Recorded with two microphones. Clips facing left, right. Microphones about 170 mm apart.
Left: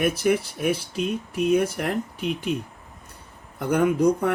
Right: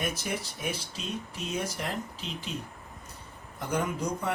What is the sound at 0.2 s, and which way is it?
Speech, 60° left (ahead or behind).